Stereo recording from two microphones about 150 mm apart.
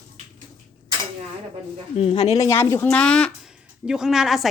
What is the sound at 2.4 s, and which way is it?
Speech, 20° left (ahead or behind).